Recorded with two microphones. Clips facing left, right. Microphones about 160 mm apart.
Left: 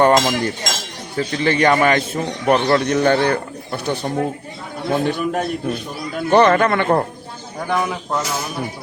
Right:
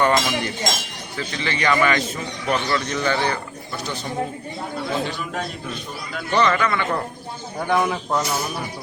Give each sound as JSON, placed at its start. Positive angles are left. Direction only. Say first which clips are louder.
{"t": 0.0, "sound": "a man's voice", "louder": "left 5 dB", "side_deg": 45}
{"t": 7.7, "sound": "speech", "louder": "even", "side_deg": 0}